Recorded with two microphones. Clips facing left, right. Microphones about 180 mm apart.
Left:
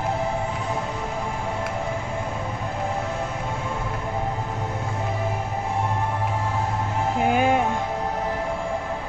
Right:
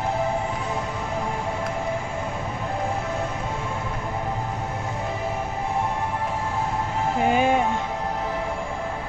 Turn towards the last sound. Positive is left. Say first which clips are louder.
# even
turn(degrees=5)  # may be behind; listen again after turning